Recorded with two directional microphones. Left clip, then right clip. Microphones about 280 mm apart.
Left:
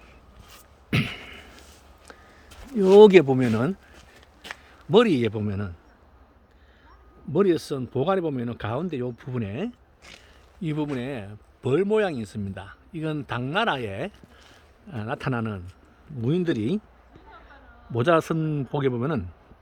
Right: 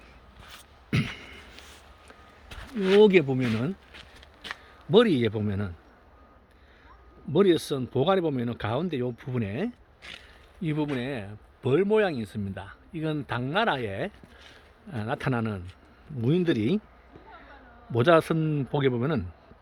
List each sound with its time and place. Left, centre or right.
0.9 s a sound: centre
3.0 s speech: centre
4.4 s speech: centre
7.3 s speech: centre
17.9 s speech: centre